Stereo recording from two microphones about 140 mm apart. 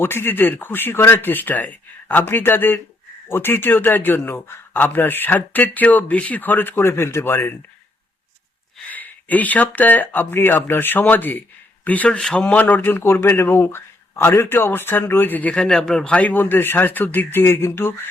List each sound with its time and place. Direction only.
0.0 s speech: 15° left (ahead or behind)
8.9 s speech: 10° left (ahead or behind)